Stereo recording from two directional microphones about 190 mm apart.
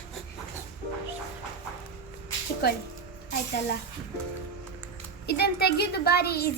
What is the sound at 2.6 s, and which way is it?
Speech, 55° left (ahead or behind).